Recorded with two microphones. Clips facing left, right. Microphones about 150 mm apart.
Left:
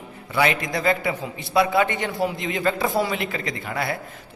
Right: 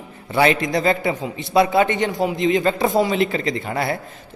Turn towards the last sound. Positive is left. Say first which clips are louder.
# right 5 dB
turn(degrees=-30)  # may be behind; listen again after turning